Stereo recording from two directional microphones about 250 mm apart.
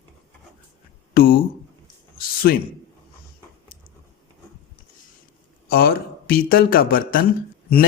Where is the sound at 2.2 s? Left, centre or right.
Left.